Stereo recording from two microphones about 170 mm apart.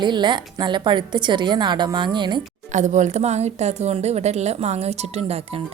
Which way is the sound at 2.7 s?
45° right (ahead or behind).